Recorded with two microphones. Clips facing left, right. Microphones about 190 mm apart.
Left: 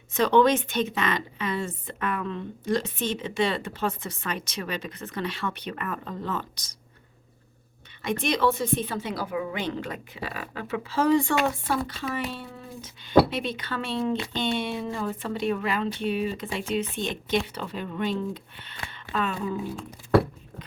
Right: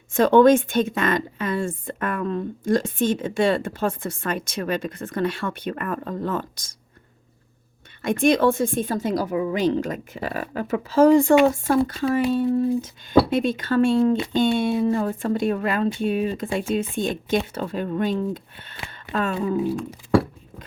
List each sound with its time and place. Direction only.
0.1 s speech: 50° right (ahead or behind)
8.0 s speech: 50° right (ahead or behind)
18.6 s a sound: 50° right (ahead or behind)
19.1 s speech: 45° right (ahead or behind)